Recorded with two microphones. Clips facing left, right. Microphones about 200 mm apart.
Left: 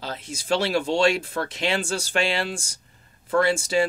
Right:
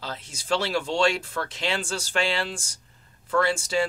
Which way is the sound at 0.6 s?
15° left (ahead or behind).